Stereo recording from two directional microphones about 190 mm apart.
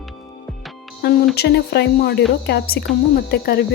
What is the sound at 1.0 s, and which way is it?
Speech, 50° left (ahead or behind).